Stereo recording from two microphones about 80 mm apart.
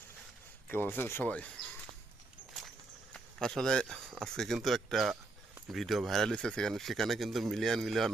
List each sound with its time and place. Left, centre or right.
0.7 s speech: left
1.3 s speech: centre
3.1 s speech: centre